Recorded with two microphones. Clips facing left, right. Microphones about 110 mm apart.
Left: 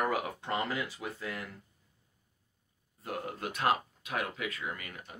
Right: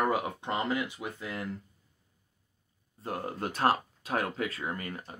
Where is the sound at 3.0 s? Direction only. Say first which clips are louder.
Right 3 dB; 35° right (ahead or behind).